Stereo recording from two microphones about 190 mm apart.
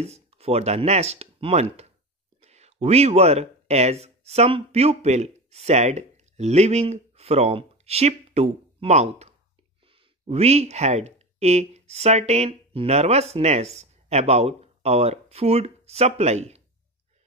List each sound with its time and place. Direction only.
0.0 s speech: 35° right (ahead or behind)